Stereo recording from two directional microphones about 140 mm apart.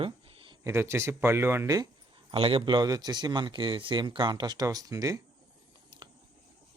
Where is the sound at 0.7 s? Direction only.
20° right (ahead or behind).